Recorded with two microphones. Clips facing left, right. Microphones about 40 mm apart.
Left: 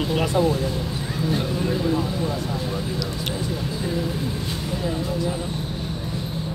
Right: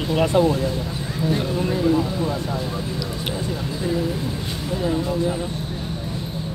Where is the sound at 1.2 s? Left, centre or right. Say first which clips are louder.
Right 2 dB; centre.